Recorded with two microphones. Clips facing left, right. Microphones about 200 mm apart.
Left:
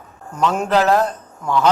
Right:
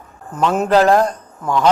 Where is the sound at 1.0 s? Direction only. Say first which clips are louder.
Right 2 dB; 5° left (ahead or behind).